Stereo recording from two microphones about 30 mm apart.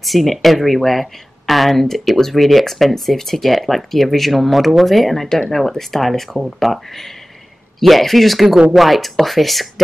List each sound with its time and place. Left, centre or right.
0.0 s speech: centre
2.3 s speech: centre
5.3 s speech: centre
5.7 s speech: centre